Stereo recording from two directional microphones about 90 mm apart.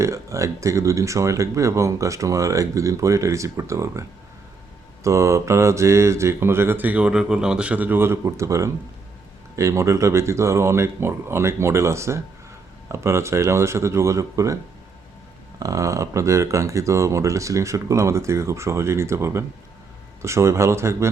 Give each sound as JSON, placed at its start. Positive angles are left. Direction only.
{"t": 0.0, "sound": "speech", "side_deg": -35}
{"t": 5.0, "sound": "mantra", "side_deg": -35}
{"t": 9.6, "sound": "speech", "side_deg": -35}